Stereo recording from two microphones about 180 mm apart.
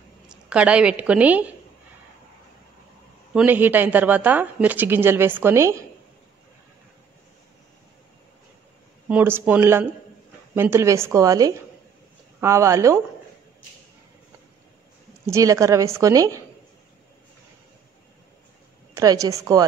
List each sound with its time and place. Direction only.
0.3 s a woman's voice: 5° right (ahead or behind)
3.3 s a woman's voice: 10° right (ahead or behind)
9.1 s a woman's voice: 10° right (ahead or behind)
15.2 s a woman's voice: 15° right (ahead or behind)
18.9 s a woman's voice: 20° right (ahead or behind)